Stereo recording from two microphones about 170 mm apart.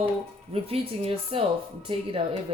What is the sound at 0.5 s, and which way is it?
Speech, 35° right (ahead or behind).